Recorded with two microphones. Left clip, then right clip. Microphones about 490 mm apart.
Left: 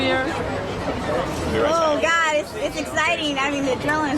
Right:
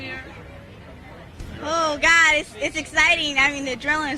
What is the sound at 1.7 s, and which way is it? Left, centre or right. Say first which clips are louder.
A woman's voice: right 2 dB; right.